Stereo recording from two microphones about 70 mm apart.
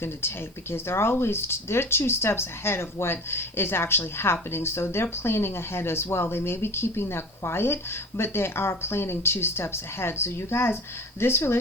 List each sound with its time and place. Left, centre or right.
0.0 s speech: left